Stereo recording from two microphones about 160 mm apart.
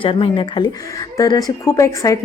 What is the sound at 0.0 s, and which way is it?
Speech, 30° left (ahead or behind).